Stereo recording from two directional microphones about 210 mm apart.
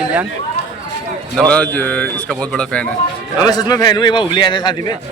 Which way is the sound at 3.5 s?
20° left (ahead or behind).